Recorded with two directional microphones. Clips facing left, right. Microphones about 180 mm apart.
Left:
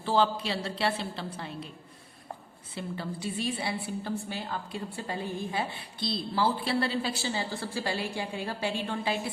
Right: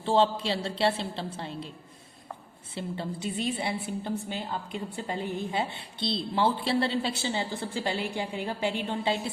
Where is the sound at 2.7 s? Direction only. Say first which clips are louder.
Right 2 dB; 25° right (ahead or behind).